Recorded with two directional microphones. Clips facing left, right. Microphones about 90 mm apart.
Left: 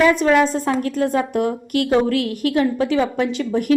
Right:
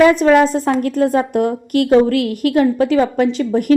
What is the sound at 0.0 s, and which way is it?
A woman's voice, 40° right (ahead or behind).